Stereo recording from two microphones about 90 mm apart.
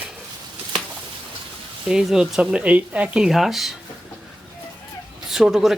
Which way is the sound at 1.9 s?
5° right (ahead or behind).